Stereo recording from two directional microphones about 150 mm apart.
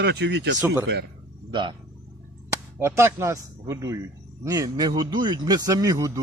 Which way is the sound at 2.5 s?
15° right (ahead or behind).